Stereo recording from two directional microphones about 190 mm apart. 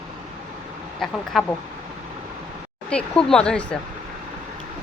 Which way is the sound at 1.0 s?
Centre (ahead or behind).